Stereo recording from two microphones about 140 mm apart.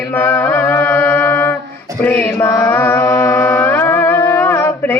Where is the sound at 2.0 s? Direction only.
10° left (ahead or behind).